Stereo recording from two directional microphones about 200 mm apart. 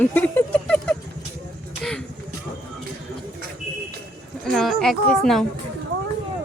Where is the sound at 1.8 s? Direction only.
5° left (ahead or behind).